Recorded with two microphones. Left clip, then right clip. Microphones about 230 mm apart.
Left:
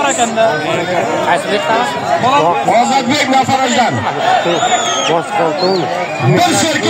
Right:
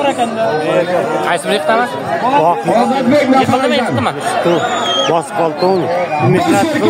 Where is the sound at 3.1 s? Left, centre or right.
Left.